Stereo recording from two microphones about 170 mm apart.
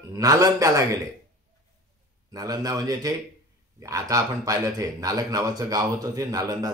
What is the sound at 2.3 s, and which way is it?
A man's voice, 20° right (ahead or behind).